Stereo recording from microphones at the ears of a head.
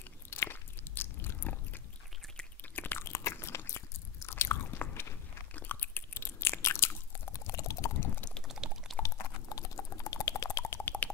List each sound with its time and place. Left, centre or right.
0.3 s biting: left
2.7 s biting: left
9.0 s a sound: left